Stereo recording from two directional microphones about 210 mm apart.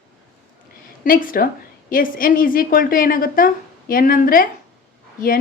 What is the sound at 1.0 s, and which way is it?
A woman's voice, 40° left (ahead or behind).